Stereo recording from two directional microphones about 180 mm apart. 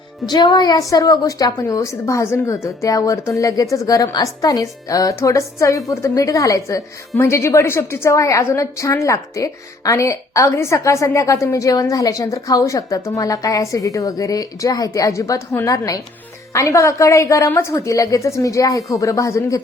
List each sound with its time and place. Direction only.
0.3 s a woman's voice: 25° left (ahead or behind)